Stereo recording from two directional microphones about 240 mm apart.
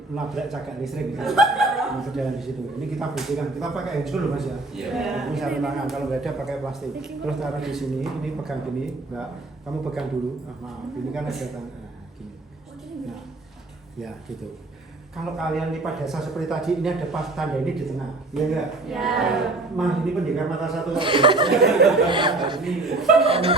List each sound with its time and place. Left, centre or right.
0.2 s a man's voice: centre
15.1 s a man's voice: centre
21.0 s speech: right
21.8 s speech: right
22.6 s a man's voice: centre
23.2 s speech: right